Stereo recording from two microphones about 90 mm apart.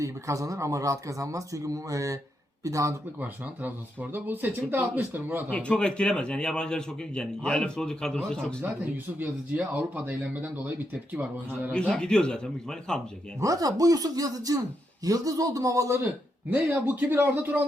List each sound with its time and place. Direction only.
0.0 s speech: 40° right (ahead or behind)
3.2 s speech: 20° right (ahead or behind)
5.5 s a man's voice: 10° left (ahead or behind)
8.6 s speech: 20° right (ahead or behind)
11.7 s a man's voice: 10° left (ahead or behind)
13.4 s speech: 40° right (ahead or behind)
16.5 s speech: 20° right (ahead or behind)